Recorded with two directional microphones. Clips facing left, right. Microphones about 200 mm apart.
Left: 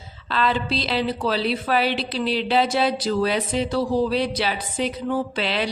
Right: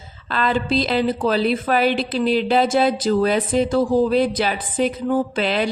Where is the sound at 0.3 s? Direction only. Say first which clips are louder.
Right 2 dB; 50° right (ahead or behind).